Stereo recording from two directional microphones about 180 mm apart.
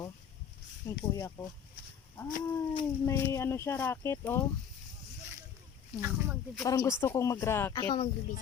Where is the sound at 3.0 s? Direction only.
15° left (ahead or behind).